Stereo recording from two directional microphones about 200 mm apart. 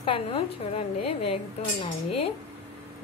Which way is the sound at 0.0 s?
30° left (ahead or behind).